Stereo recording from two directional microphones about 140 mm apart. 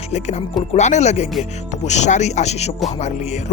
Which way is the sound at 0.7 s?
55° left (ahead or behind).